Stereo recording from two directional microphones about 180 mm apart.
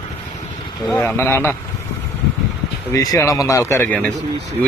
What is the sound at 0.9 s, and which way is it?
Speech, 10° left (ahead or behind).